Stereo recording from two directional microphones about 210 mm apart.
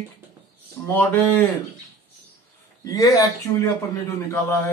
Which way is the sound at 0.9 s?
10° left (ahead or behind).